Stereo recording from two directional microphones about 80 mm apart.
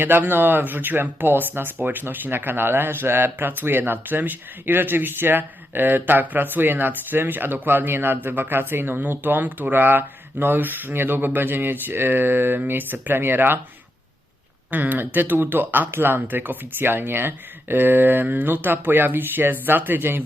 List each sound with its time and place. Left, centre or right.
0.0 s speech: right
14.7 s speech: right